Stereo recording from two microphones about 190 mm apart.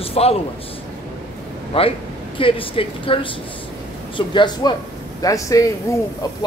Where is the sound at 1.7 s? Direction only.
30° left (ahead or behind).